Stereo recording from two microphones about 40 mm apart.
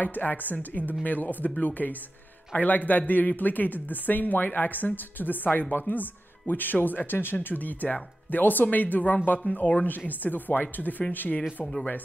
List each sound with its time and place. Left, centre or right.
0.0 s speech: left
7.4 s speech: left